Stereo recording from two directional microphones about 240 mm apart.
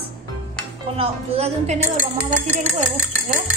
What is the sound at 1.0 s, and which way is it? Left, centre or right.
A woman's voice, right.